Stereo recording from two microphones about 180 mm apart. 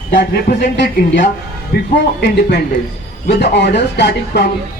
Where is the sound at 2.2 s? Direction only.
65° left (ahead or behind).